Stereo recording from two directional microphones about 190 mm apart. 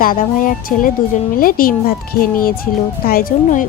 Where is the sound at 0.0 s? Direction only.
45° left (ahead or behind).